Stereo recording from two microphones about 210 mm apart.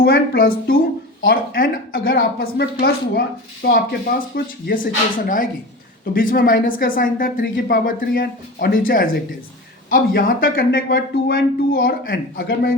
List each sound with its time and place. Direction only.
0.0 s a woman's voice: 45° left (ahead or behind)
9.9 s a woman's voice: 45° left (ahead or behind)